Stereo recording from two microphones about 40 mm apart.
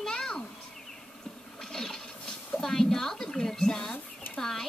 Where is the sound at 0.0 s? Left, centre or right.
Centre.